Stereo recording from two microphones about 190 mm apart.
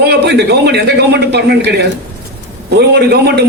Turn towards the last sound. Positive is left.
turn(degrees=-60)  # may be behind; listen again after turning